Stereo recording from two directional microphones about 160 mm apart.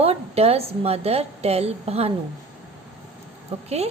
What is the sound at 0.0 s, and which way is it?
A woman's voice, 40° right (ahead or behind).